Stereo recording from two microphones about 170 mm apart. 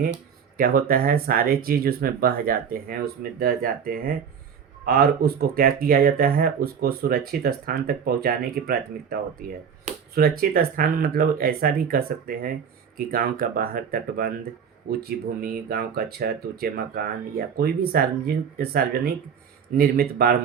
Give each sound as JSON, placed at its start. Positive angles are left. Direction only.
{"t": 0.0, "sound": "speech", "side_deg": -60}
{"t": 10.2, "sound": "speech", "side_deg": -60}